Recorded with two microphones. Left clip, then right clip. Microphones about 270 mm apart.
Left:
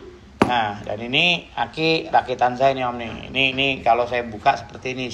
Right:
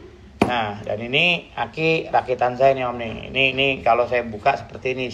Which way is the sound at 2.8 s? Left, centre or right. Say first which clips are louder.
Even; left.